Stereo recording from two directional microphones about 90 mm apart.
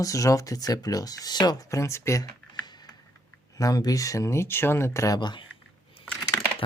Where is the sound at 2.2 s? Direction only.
50° left (ahead or behind).